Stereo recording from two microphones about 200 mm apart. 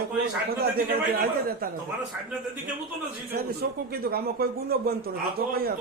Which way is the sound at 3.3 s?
50° right (ahead or behind).